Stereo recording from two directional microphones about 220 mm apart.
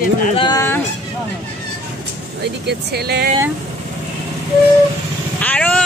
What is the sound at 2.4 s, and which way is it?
Speech, 45° right (ahead or behind).